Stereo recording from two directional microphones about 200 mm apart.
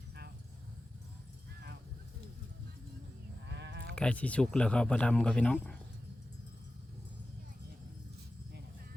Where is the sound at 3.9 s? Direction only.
5° left (ahead or behind).